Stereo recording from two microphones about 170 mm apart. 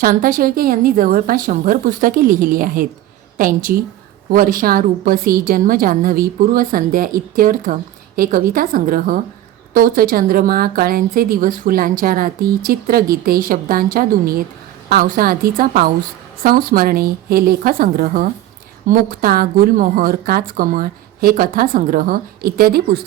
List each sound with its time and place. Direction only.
0.0 s a woman's voice: 55° right (ahead or behind)